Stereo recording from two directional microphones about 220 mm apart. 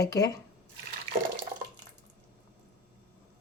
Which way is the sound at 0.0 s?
15° left (ahead or behind).